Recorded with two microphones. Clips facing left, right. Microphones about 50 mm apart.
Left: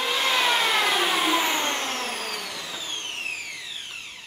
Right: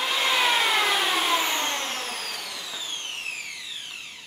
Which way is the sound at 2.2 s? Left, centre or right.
Left.